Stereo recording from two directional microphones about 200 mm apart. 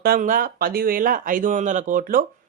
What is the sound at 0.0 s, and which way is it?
Speech, 45° right (ahead or behind).